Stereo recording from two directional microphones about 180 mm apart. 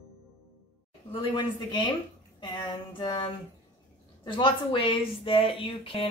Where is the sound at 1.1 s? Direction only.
25° left (ahead or behind).